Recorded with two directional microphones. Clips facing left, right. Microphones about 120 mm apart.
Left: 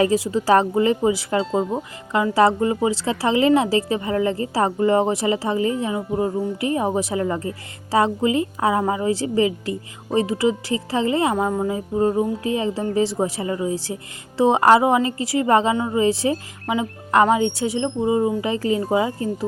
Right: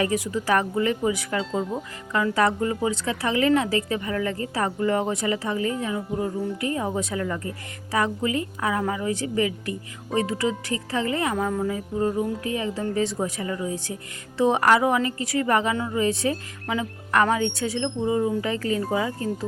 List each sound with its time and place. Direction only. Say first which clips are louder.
0.0 s a woman's voice: left 6 dB; 25° left (ahead or behind)